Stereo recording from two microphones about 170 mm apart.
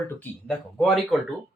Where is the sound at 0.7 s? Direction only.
Centre (ahead or behind).